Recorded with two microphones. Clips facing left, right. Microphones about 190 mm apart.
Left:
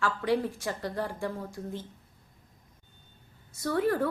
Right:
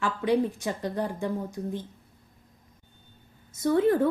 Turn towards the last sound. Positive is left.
turn(degrees=-20)  # may be behind; listen again after turning